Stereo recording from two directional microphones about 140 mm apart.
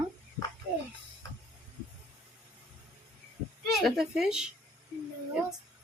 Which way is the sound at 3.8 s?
5° right (ahead or behind).